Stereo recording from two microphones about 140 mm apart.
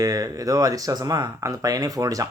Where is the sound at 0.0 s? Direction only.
25° right (ahead or behind).